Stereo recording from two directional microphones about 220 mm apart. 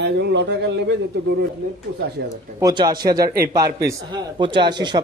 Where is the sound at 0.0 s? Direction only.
50° right (ahead or behind).